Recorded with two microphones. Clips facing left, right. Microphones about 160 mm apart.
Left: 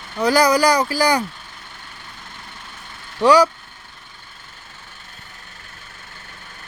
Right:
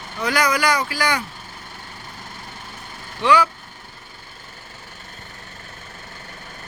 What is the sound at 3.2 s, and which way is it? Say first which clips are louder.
Speech: left 4 dB; 40° left (ahead or behind).